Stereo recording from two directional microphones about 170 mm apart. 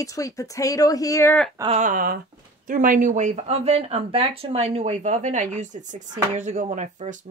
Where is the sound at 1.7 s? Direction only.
50° right (ahead or behind).